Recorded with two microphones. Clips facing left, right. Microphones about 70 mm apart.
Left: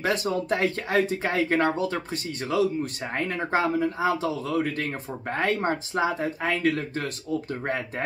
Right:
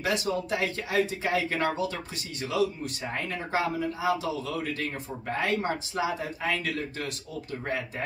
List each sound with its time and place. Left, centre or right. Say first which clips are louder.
0.0 s speech: left 3 dB; left